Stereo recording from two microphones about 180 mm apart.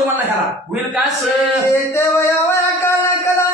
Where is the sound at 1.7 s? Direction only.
15° left (ahead or behind).